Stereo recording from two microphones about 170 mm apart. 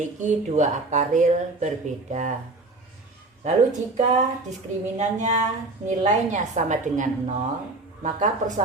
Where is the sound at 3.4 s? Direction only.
40° right (ahead or behind).